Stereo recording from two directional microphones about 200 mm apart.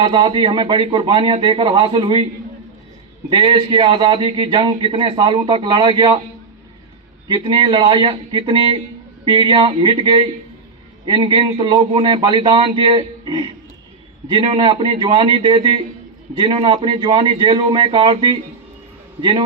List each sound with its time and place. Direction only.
0.0 s a man's voice: 25° right (ahead or behind)
3.2 s a man's voice: 25° right (ahead or behind)
7.3 s a man's voice: 25° right (ahead or behind)